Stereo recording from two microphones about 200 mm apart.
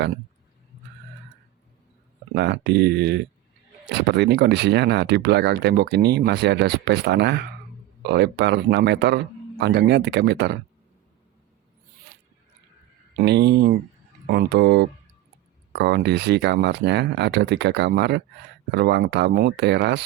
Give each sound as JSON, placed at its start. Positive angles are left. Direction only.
{"t": 2.3, "sound": "speech", "side_deg": -60}
{"t": 13.1, "sound": "speech", "side_deg": -55}